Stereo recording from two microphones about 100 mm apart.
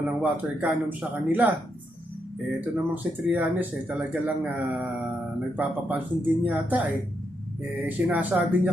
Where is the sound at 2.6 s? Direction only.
20° right (ahead or behind).